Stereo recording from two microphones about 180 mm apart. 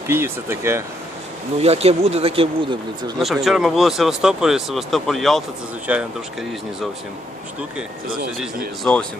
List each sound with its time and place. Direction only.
0.1 s speech: 15° right (ahead or behind)
1.5 s speech: 35° right (ahead or behind)
3.2 s speech: centre (ahead or behind)
8.8 s speech: 5° left (ahead or behind)